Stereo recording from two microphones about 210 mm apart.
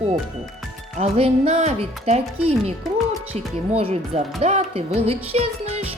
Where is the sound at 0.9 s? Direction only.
30° right (ahead or behind).